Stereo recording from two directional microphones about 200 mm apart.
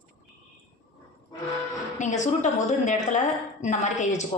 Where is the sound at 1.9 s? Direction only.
35° left (ahead or behind).